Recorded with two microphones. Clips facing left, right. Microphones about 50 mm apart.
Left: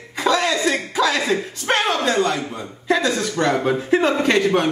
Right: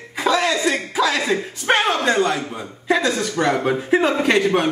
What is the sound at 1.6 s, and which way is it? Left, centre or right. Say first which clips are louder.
Speech: right 2 dB; centre.